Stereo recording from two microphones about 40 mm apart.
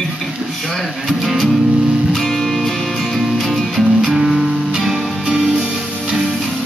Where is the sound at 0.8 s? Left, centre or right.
Centre.